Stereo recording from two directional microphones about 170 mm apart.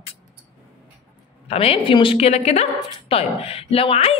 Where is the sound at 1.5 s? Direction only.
35° left (ahead or behind).